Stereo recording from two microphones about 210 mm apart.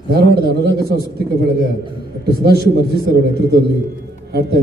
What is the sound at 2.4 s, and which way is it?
A man's voice, 50° right (ahead or behind).